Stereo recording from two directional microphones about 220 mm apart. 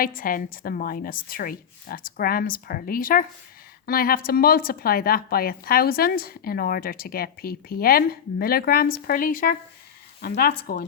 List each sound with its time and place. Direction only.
0.0 s a woman's voice: 40° left (ahead or behind)